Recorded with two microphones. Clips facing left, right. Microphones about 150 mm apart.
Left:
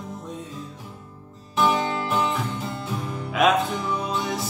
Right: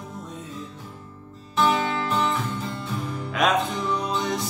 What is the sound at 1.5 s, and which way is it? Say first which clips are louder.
Music: even; 15° left (ahead or behind).